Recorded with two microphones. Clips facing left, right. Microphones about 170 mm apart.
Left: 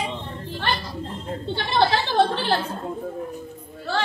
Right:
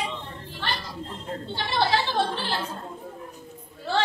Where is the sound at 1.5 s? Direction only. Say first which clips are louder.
Left 4 dB; 60° left (ahead or behind).